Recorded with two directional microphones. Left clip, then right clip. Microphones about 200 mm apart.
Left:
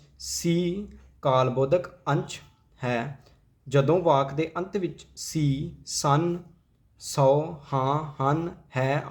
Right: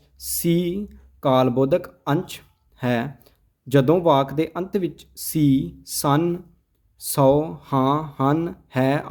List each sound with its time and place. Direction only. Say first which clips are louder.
0.2 s speech: right 4 dB; 45° right (ahead or behind)